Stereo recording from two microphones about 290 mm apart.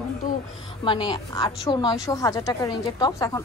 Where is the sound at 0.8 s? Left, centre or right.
Centre.